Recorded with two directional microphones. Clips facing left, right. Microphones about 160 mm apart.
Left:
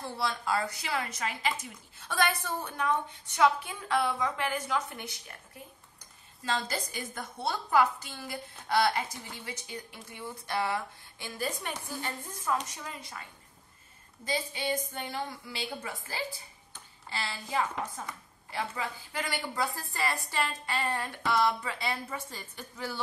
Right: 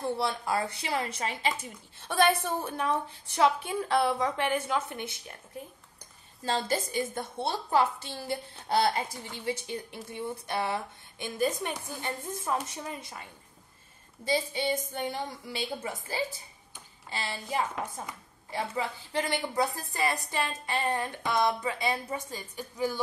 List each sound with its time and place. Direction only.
0.0 s a woman's voice: 25° right (ahead or behind)
6.4 s a woman's voice: 30° right (ahead or behind)
14.2 s a woman's voice: 25° right (ahead or behind)